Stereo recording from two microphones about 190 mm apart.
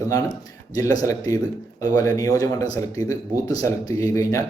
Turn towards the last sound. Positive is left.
turn(degrees=15)  # may be behind; listen again after turning